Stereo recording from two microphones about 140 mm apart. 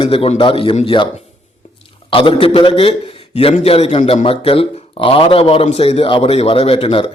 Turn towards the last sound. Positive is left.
turn(degrees=40)  # may be behind; listen again after turning